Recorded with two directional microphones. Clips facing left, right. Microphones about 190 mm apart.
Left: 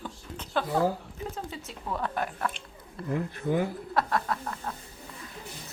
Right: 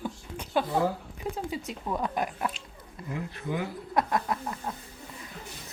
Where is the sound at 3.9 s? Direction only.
20° right (ahead or behind).